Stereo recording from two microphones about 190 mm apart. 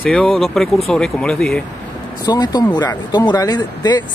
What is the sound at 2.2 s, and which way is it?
Speech, 20° left (ahead or behind).